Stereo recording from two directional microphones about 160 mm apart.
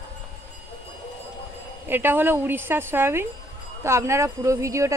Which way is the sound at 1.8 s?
15° right (ahead or behind).